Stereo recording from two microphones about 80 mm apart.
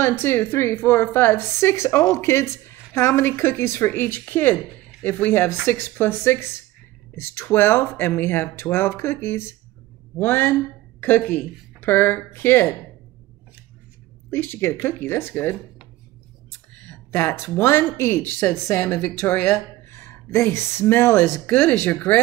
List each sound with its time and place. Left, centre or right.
0.0 s speech: left
14.3 s speech: left
16.7 s a sound: left
17.1 s speech: left
19.5 s speech: left; by 21.9 s centre